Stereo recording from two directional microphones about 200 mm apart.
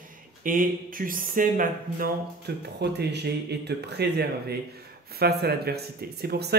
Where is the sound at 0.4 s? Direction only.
45° right (ahead or behind).